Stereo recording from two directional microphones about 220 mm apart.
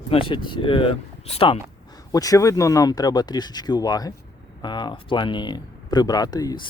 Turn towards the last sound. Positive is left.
turn(degrees=15)  # may be behind; listen again after turning